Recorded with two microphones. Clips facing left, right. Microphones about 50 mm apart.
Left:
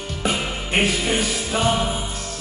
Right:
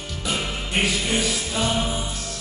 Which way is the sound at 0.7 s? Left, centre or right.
Left.